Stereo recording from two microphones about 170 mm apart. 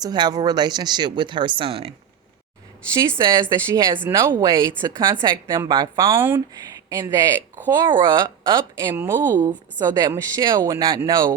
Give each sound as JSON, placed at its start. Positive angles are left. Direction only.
{"t": 0.0, "sound": "a woman's voice", "side_deg": -25}
{"t": 2.9, "sound": "a woman's voice", "side_deg": -25}
{"t": 9.0, "sound": "speech", "side_deg": -15}
{"t": 9.8, "sound": "a woman's voice", "side_deg": -25}